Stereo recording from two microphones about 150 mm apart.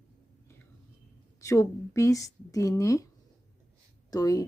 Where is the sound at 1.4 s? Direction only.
20° left (ahead or behind).